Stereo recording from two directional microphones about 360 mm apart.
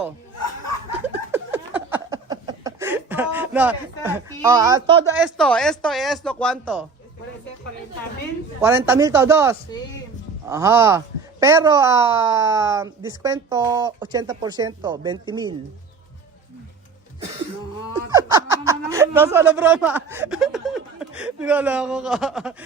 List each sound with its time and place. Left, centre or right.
1.0 s a sound: centre
5.2 s speech: centre
8.6 s speech: centre
18.1 s speech: centre